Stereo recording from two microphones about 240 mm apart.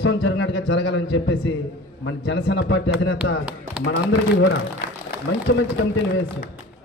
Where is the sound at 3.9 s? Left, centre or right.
Left.